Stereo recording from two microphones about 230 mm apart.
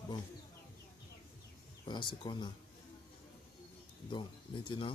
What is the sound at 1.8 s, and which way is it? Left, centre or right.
Speech, centre.